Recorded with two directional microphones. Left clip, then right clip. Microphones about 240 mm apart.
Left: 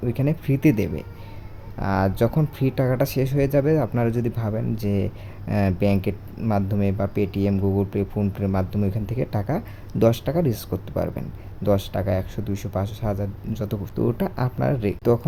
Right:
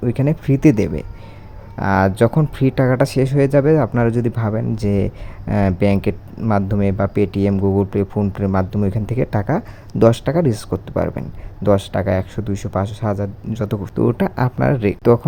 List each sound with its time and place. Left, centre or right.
0.0 s speech: centre